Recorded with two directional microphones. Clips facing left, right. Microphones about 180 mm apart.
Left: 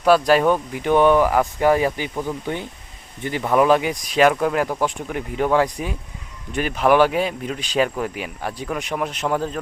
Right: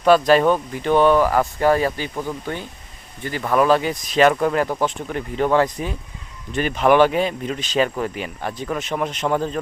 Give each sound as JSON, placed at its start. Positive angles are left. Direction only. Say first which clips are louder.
{"t": 0.0, "sound": "speech", "louder": "right 1 dB", "side_deg": 10}